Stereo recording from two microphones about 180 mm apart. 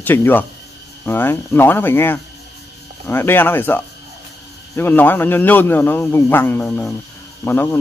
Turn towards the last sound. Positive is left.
turn(degrees=10)  # may be behind; listen again after turning